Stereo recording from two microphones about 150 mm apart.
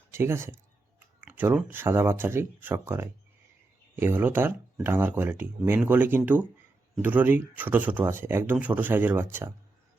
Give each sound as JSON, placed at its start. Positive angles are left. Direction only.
{"t": 0.1, "sound": "speech", "side_deg": -15}